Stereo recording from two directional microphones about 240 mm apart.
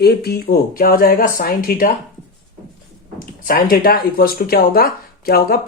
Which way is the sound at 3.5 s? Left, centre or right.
Left.